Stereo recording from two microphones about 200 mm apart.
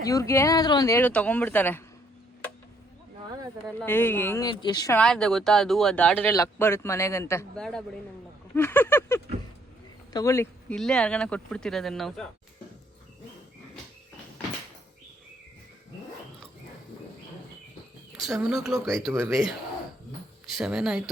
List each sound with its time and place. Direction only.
0.0 s speech: 15° left (ahead or behind)
3.8 s speech: 10° left (ahead or behind)
4.4 s speech: 20° left (ahead or behind)
4.9 s speech: 5° left (ahead or behind)
18.2 s speech: centre (ahead or behind)